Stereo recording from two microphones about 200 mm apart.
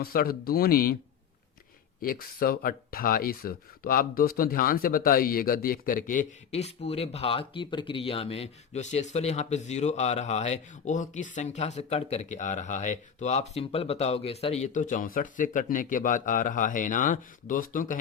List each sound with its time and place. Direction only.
0.0 s speech: 50° left (ahead or behind)
2.0 s speech: 45° left (ahead or behind)